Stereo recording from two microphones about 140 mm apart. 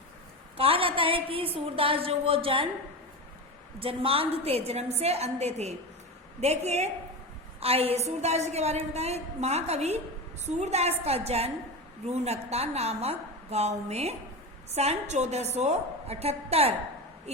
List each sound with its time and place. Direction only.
0.5 s a sound: 40° right (ahead or behind)
1.5 s a woman's voice: 40° right (ahead or behind)
3.8 s a woman's voice: 40° right (ahead or behind)